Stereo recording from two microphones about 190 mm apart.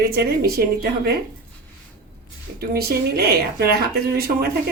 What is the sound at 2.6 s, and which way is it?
Speech, 55° right (ahead or behind).